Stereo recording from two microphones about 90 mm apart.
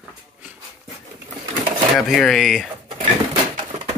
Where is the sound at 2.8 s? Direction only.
85° right.